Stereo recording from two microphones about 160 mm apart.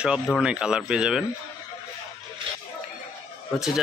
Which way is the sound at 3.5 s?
Centre (ahead or behind).